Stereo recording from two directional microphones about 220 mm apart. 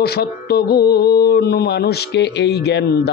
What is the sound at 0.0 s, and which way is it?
Mantra, 45° left (ahead or behind).